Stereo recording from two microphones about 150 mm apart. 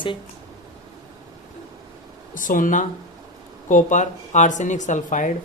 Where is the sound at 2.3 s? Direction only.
65° left (ahead or behind).